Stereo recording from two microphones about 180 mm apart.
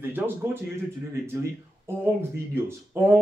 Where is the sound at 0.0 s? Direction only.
10° right (ahead or behind).